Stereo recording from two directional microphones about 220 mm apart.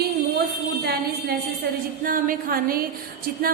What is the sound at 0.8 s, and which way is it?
A woman's voice, 45° right (ahead or behind).